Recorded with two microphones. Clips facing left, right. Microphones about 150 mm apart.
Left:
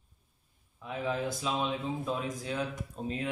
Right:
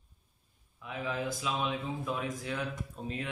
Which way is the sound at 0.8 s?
30° left (ahead or behind).